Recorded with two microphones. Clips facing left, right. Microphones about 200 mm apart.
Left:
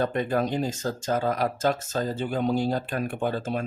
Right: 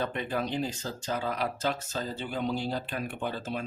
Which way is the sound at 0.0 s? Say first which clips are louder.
Left 6 dB; 45° left (ahead or behind).